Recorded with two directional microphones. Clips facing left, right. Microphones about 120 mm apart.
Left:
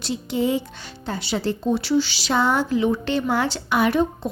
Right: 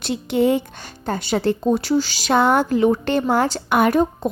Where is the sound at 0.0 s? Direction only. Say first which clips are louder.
Right 5 dB; 60° right (ahead or behind).